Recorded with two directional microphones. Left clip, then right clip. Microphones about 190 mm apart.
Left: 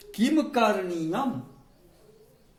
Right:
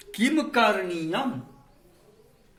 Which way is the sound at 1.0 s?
10° left (ahead or behind).